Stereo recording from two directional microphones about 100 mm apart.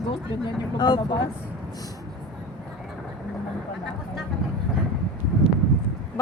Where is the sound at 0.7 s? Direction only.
45° left (ahead or behind).